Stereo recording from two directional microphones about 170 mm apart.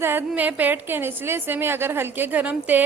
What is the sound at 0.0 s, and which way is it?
A woman's voice, 10° right (ahead or behind).